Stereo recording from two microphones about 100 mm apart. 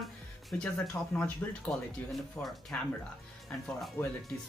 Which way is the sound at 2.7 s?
15° left (ahead or behind).